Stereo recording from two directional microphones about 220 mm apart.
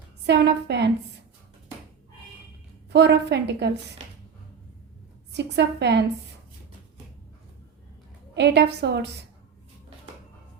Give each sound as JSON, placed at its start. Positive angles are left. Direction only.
{"t": 0.3, "sound": "a woman's voice", "side_deg": -50}
{"t": 2.9, "sound": "a woman's voice", "side_deg": -50}
{"t": 5.3, "sound": "a woman's voice", "side_deg": -50}
{"t": 8.4, "sound": "a woman's voice", "side_deg": -50}